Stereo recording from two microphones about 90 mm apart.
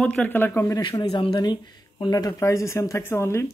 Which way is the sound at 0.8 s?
60° left (ahead or behind).